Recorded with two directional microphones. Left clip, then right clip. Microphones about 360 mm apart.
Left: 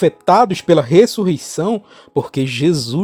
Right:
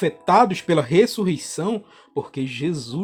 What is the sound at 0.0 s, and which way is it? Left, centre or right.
Speech, left.